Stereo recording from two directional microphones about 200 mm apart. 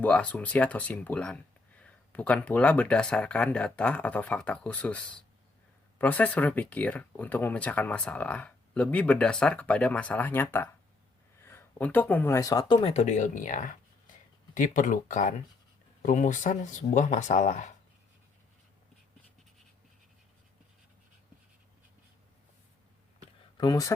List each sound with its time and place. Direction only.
0.0 s speech: 5° left (ahead or behind); by 17.7 s 40° left (ahead or behind)
23.6 s speech: 20° left (ahead or behind)